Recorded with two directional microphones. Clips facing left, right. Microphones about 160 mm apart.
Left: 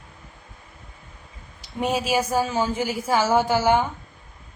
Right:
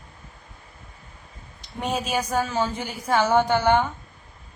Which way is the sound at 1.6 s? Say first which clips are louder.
Left 3 dB; 5° left (ahead or behind).